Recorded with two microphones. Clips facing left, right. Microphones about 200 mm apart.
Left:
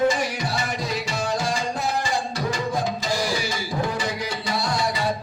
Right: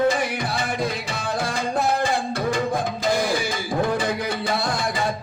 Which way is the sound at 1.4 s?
55° right (ahead or behind).